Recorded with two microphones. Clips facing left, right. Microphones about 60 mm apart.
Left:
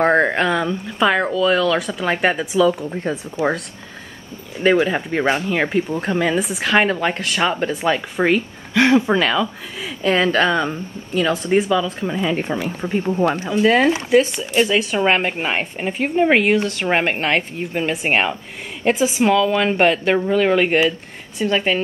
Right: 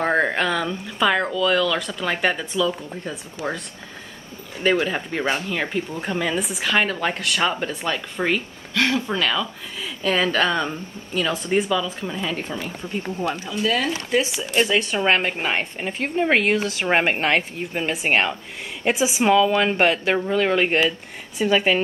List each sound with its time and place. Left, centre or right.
0.0 s speech: centre
2.5 s speech: centre
3.0 s speech: left
4.6 s a woman's voice: centre
8.2 s a woman's voice: left; by 11.9 s centre
12.0 s speech: centre
12.8 s speech: left
14.6 s a woman's voice: centre
18.9 s a woman's voice: centre